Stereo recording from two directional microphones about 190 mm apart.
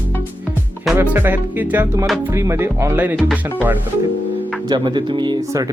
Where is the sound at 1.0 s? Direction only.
10° right (ahead or behind).